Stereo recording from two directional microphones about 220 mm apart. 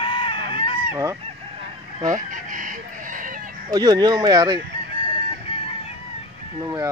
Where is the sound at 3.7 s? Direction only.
20° right (ahead or behind).